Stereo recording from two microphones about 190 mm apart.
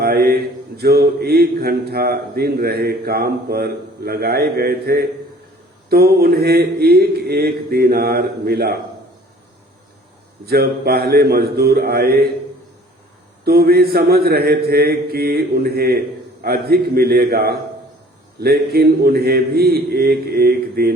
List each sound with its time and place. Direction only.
0.0 s a sound: 55° right (ahead or behind)
0.8 s speech: 55° right (ahead or behind)
10.4 s speech: 55° right (ahead or behind)
13.4 s a man's voice: 55° right (ahead or behind)